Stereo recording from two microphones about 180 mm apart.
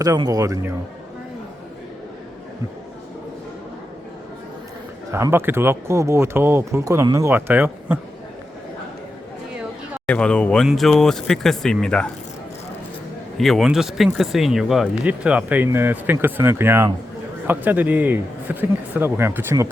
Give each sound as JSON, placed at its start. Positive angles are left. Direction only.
{"t": 0.0, "sound": "a man's voice", "side_deg": -20}
{"t": 5.1, "sound": "speech", "side_deg": -15}
{"t": 10.1, "sound": "speech", "side_deg": 5}
{"t": 13.3, "sound": "speech", "side_deg": 0}